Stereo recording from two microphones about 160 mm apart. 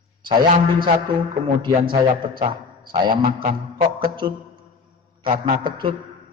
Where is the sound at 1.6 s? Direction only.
30° right (ahead or behind).